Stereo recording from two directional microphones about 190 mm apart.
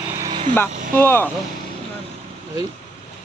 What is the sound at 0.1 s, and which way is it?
Vehicle, 20° right (ahead or behind).